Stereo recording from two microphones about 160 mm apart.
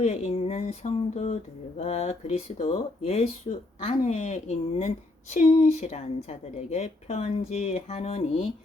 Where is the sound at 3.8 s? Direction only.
40° left (ahead or behind).